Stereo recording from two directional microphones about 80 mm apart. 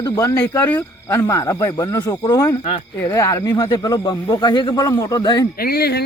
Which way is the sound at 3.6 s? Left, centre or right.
Left.